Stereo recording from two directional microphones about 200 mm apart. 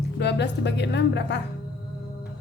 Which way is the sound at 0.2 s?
60° left (ahead or behind).